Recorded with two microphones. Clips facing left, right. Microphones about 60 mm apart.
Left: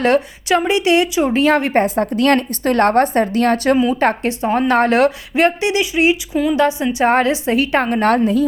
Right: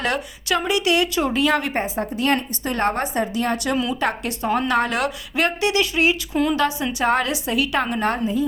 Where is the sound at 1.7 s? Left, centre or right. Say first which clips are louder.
Left 8 dB; left.